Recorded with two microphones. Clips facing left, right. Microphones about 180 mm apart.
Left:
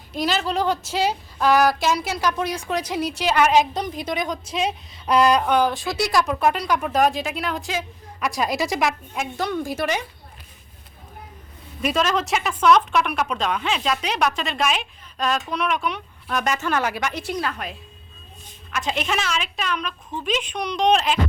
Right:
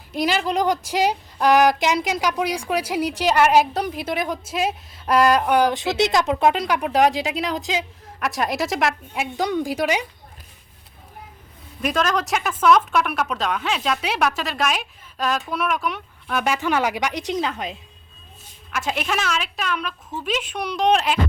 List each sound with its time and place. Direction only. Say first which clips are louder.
0.1 s speech: right 2 dB; 10° right (ahead or behind)
6.9 s speech: right 3 dB; 90° right
7.6 s speech: right 2 dB; 15° right (ahead or behind)
8.2 s speech: even; centre (ahead or behind)
11.8 s speech: even; centre (ahead or behind); by 17.7 s 20° right (ahead or behind)
18.7 s speech: even; 5° right (ahead or behind)